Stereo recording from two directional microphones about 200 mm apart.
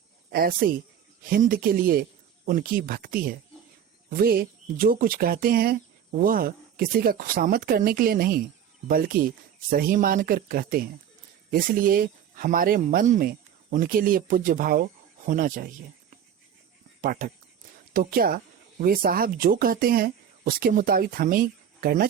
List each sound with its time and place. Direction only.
0.3 s speech: 45° right (ahead or behind)